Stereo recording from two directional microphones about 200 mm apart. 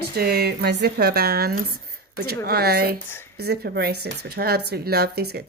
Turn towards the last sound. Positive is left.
turn(degrees=-55)  # may be behind; listen again after turning